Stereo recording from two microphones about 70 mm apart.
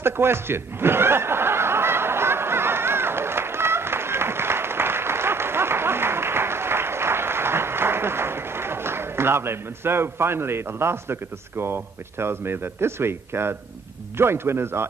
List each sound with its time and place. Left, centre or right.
0.0 s snicker: right
14.1 s a man's voice: right